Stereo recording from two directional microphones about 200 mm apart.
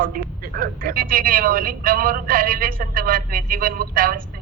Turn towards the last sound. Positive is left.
turn(degrees=-45)  # may be behind; listen again after turning